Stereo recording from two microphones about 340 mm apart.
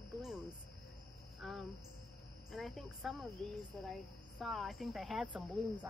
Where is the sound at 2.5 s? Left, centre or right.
Centre.